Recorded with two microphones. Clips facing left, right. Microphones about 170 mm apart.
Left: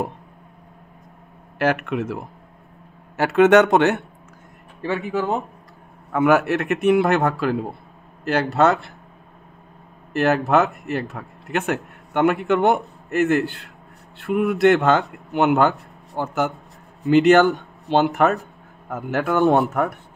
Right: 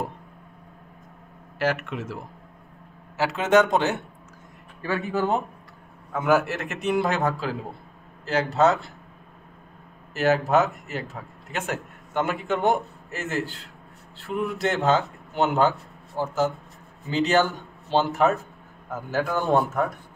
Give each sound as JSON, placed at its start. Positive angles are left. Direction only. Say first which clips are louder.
{"t": 1.6, "sound": "a man's voice", "louder": "left 5 dB", "side_deg": 55}
{"t": 3.2, "sound": "speech", "louder": "left 6 dB", "side_deg": 60}
{"t": 4.8, "sound": "speech", "louder": "left 3 dB", "side_deg": 25}
{"t": 6.1, "sound": "a man's voice", "louder": "left 5 dB", "side_deg": 65}
{"t": 10.1, "sound": "a man's voice", "louder": "left 3 dB", "side_deg": 65}
{"t": 17.0, "sound": "a man's voice", "louder": "left 8 dB", "side_deg": 60}